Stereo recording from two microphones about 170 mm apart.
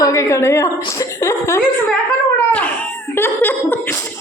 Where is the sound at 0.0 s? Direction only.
20° left (ahead or behind).